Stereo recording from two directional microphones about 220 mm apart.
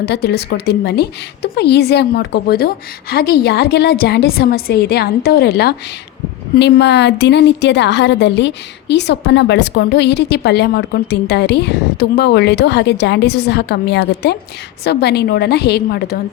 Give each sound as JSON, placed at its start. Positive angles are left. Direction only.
{"t": 0.0, "sound": "a woman's voice", "side_deg": 50}